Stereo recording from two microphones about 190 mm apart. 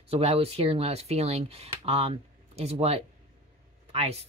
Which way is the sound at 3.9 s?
30° right (ahead or behind).